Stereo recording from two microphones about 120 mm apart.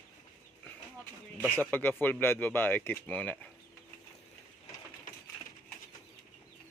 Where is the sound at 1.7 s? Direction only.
15° left (ahead or behind).